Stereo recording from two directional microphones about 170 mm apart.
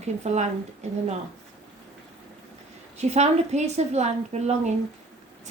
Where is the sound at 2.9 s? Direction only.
40° right (ahead or behind).